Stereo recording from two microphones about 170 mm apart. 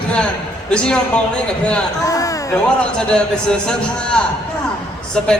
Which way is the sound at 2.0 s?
20° left (ahead or behind).